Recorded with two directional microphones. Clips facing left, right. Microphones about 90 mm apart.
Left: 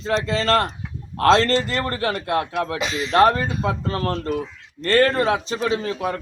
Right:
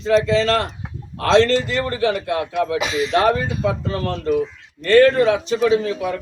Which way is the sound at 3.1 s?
45° left (ahead or behind).